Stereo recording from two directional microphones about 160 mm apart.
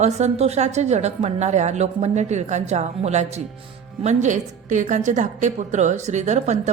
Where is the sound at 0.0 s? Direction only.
45° right (ahead or behind).